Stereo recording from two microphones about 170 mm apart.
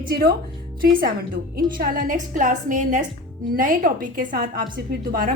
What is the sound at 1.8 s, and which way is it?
A woman's voice, 55° right (ahead or behind).